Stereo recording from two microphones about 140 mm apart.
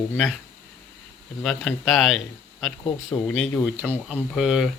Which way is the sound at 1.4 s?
Centre (ahead or behind).